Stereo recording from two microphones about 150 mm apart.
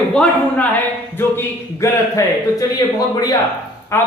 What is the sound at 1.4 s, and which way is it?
A man's voice, 20° left (ahead or behind).